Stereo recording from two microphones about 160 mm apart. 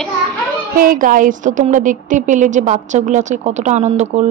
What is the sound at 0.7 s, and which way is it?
A woman's voice, 60° right (ahead or behind).